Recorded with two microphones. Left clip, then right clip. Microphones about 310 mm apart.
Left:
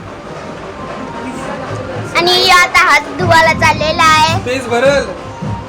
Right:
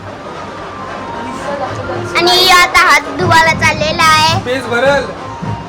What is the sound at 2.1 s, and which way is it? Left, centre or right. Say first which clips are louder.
Speech: right 1 dB; centre.